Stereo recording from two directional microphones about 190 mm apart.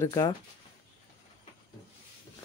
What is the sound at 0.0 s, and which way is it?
Speech, 20° left (ahead or behind).